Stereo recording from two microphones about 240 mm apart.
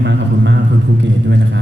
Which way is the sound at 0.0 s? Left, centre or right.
Right.